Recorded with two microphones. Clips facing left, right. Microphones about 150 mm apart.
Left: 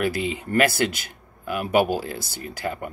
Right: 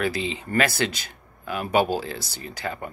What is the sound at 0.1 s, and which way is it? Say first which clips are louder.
Speech: left 2 dB; 50° left (ahead or behind).